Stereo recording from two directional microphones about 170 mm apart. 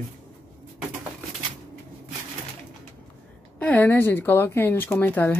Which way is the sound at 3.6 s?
10° left (ahead or behind).